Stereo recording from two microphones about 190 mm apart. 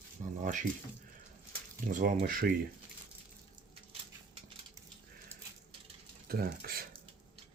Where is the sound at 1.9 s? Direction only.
45° right (ahead or behind).